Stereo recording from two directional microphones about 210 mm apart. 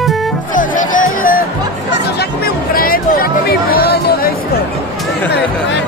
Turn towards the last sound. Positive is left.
turn(degrees=45)  # may be behind; listen again after turning